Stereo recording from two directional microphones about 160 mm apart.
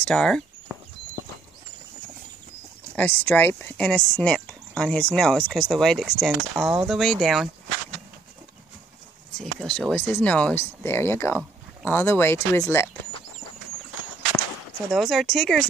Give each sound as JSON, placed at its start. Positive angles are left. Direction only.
{"t": 0.0, "sound": "a sound", "side_deg": 5}
{"t": 3.0, "sound": "speech", "side_deg": 10}
{"t": 9.4, "sound": "speech", "side_deg": 5}
{"t": 14.9, "sound": "speech", "side_deg": 0}